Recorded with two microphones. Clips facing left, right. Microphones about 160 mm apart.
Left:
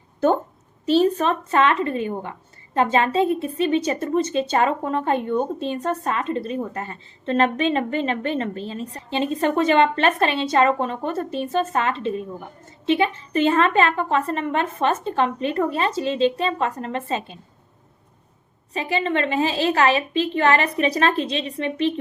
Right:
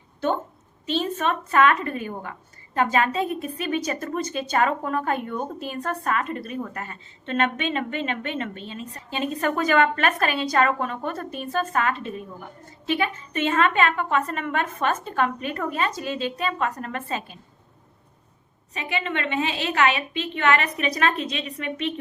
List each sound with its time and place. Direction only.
0.9 s a woman's voice: 40° left (ahead or behind)
18.7 s a woman's voice: 30° left (ahead or behind)